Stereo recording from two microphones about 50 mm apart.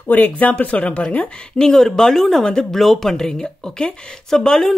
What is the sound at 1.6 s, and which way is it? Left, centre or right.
Speech, centre.